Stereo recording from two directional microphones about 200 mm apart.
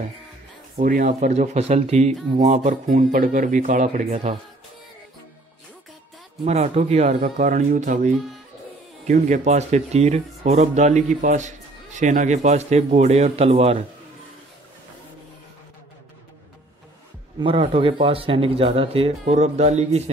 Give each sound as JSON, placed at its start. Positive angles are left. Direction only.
{"t": 0.7, "sound": "speech", "side_deg": -40}
{"t": 6.4, "sound": "speech", "side_deg": -35}
{"t": 17.4, "sound": "speech", "side_deg": -25}